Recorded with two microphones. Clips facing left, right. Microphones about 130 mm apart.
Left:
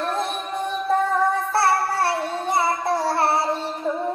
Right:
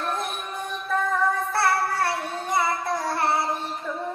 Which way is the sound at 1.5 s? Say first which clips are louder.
Left 3 dB; 30° left (ahead or behind).